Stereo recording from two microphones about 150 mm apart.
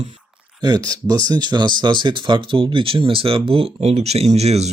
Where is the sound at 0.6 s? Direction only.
25° right (ahead or behind); by 4.7 s 45° right (ahead or behind).